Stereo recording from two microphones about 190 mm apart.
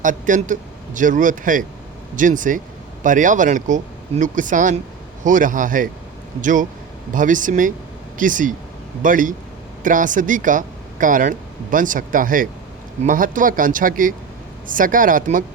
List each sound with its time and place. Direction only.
0.0 s speech: 45° right (ahead or behind)